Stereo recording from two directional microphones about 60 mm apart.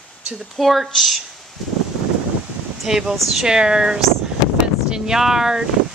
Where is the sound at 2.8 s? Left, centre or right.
Centre.